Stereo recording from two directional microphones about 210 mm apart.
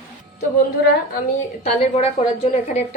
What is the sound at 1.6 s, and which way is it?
Speech, 30° left (ahead or behind).